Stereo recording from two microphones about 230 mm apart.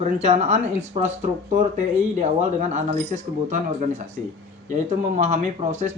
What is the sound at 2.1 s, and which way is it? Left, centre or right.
Speech, right.